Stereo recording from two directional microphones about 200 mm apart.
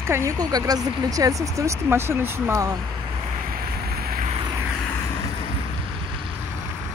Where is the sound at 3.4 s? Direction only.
50° right (ahead or behind).